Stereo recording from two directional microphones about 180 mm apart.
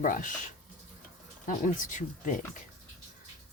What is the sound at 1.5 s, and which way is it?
Speech, 45° left (ahead or behind).